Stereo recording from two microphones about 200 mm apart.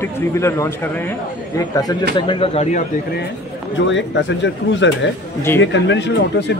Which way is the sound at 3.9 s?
65° left (ahead or behind).